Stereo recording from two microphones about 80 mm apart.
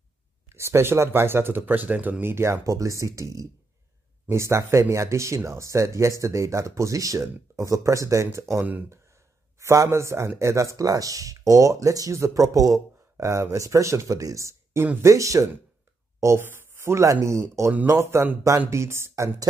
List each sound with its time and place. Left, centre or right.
0.6 s speech: right